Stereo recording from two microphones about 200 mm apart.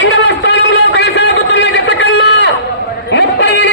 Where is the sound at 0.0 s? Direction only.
60° left (ahead or behind).